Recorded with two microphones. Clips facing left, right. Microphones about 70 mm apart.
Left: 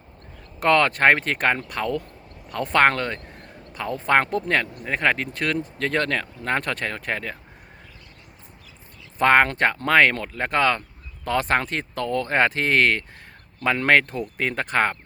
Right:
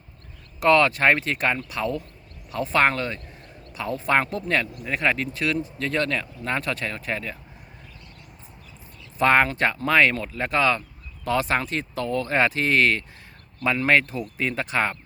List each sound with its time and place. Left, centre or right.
0.6 s speech: left
9.1 s speech: left